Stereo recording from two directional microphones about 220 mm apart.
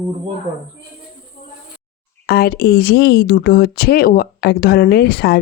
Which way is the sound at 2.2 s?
45° left (ahead or behind).